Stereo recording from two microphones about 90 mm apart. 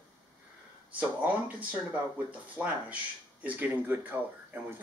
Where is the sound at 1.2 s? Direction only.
15° right (ahead or behind).